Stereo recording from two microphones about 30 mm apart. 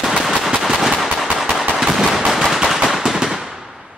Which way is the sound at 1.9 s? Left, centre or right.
Centre.